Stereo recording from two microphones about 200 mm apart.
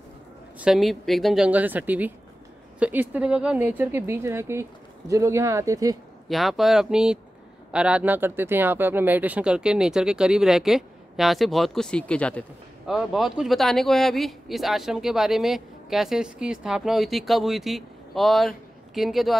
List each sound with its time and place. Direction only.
0.6 s a woman's voice: centre (ahead or behind)
6.2 s speech: centre (ahead or behind)